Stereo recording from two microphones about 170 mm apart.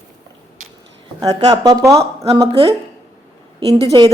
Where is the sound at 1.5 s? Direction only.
20° right (ahead or behind).